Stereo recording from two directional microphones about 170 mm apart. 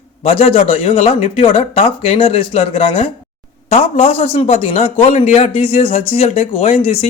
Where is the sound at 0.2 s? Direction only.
35° left (ahead or behind).